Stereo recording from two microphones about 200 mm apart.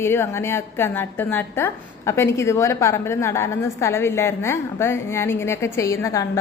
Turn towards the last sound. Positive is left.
turn(degrees=15)  # may be behind; listen again after turning